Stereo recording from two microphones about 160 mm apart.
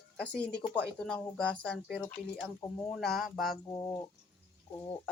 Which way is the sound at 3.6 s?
20° left (ahead or behind).